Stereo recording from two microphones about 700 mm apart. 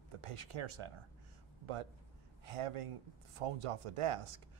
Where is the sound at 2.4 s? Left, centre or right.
Right.